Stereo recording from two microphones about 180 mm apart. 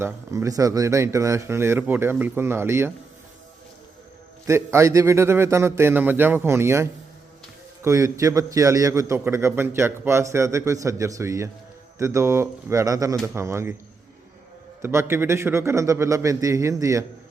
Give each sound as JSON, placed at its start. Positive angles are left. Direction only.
{"t": 0.0, "sound": "a man's voice", "side_deg": -15}
{"t": 4.4, "sound": "a man's voice", "side_deg": -15}
{"t": 14.8, "sound": "a man's voice", "side_deg": -15}